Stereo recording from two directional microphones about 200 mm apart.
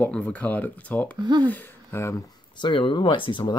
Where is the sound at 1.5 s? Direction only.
10° left (ahead or behind).